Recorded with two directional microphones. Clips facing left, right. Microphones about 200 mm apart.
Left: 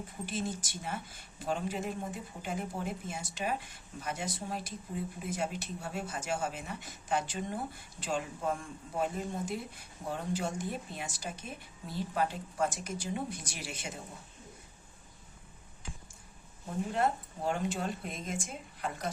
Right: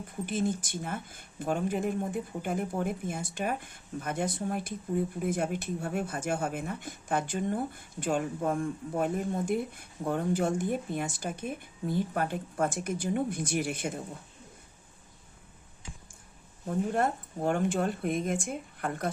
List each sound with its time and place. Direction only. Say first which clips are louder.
0.3 s speech: right 7 dB; 55° right (ahead or behind)
16.6 s speech: right 3 dB; 50° right (ahead or behind)